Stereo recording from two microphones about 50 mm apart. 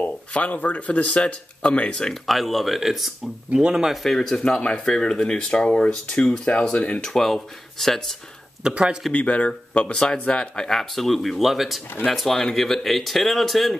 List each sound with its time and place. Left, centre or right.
0.3 s speech: left
2.2 s speech: centre
4.0 s speech: centre
7.0 s speech: centre
8.6 s speech: centre
9.1 s speech: left; by 13.7 s centre